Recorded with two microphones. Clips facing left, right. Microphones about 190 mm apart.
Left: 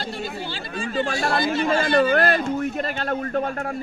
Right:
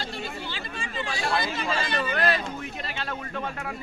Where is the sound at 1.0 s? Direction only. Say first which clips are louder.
Left 2 dB; 50° left (ahead or behind).